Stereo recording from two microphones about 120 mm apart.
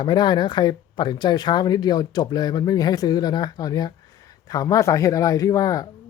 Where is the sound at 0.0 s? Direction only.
35° left (ahead or behind).